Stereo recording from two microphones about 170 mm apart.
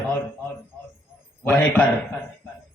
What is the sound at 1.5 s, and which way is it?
Speech, 5° left (ahead or behind).